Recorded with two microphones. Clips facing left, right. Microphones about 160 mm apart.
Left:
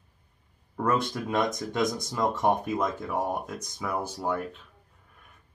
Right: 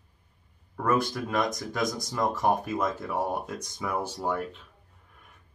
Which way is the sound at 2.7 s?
5° right (ahead or behind).